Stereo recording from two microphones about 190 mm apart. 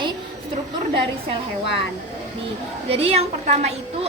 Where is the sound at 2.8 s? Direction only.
30° right (ahead or behind).